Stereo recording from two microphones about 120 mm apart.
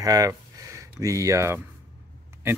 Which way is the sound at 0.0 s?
30° right (ahead or behind).